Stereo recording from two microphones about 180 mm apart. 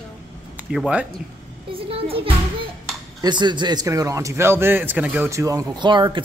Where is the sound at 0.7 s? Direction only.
5° right (ahead or behind).